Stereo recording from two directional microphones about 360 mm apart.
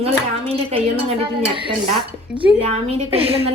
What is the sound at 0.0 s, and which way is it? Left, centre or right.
Speech, centre.